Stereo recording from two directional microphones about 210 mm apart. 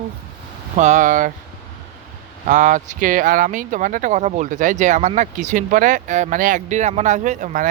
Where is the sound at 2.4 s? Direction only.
35° right (ahead or behind).